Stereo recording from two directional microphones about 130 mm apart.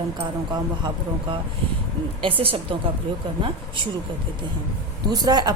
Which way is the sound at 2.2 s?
45° right (ahead or behind).